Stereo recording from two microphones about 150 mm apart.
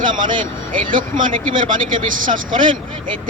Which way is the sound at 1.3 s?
30° right (ahead or behind).